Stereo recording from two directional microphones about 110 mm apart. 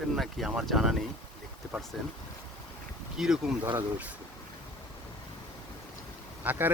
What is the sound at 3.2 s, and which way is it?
Speech, 5° right (ahead or behind).